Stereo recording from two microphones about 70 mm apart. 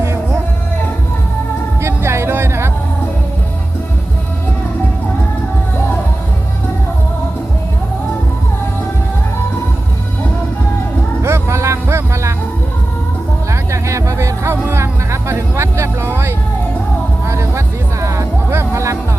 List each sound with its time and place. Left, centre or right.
1.8 s music: right
11.2 s music: right
13.5 s music: right